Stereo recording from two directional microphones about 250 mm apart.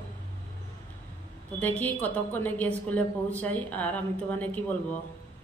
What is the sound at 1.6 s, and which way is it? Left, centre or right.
A woman's voice, centre.